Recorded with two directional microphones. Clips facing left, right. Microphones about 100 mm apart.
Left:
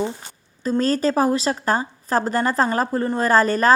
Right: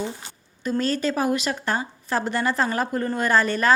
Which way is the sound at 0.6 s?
35° left (ahead or behind).